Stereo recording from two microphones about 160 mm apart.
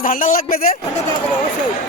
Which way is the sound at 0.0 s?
60° left (ahead or behind).